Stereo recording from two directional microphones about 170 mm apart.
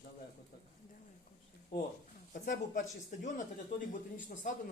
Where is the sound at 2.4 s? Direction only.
50° left (ahead or behind).